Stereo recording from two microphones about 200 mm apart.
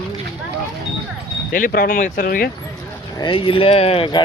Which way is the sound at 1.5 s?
45° left (ahead or behind).